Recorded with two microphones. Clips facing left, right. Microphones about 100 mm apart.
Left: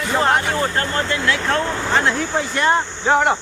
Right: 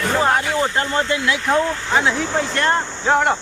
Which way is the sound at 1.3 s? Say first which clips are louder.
Right 1 dB; 20° right (ahead or behind).